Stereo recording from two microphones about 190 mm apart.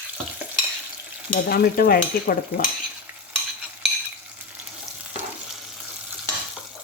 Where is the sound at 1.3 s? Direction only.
50° left (ahead or behind).